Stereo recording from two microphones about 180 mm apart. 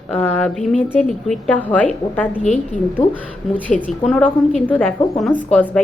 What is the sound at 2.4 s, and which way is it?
Speech, 40° left (ahead or behind).